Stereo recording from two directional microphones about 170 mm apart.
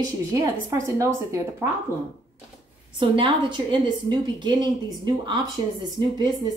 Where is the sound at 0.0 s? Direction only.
20° right (ahead or behind).